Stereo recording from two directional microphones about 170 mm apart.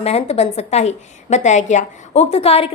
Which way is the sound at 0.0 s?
40° left (ahead or behind).